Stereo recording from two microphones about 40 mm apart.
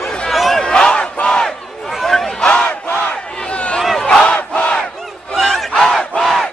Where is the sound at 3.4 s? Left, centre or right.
Left.